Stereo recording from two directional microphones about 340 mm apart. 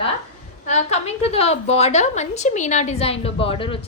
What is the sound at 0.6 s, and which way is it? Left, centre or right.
A woman's voice, centre.